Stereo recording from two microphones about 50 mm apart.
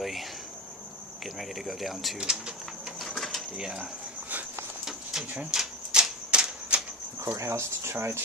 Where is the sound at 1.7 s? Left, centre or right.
Centre.